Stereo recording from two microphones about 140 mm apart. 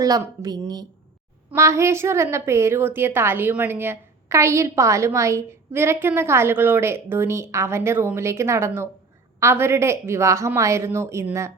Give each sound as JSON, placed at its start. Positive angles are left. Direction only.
{"t": 0.0, "sound": "a woman's voice", "side_deg": -25}